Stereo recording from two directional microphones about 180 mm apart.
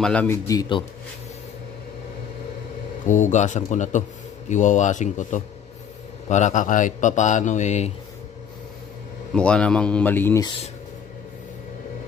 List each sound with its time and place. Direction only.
0.0 s speech: 5° left (ahead or behind)
0.5 s speech: 25° left (ahead or behind)
3.1 s speech: 45° left (ahead or behind)
9.3 s speech: 5° left (ahead or behind)